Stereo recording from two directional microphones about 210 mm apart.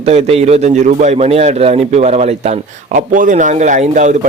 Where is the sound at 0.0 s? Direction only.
30° right (ahead or behind).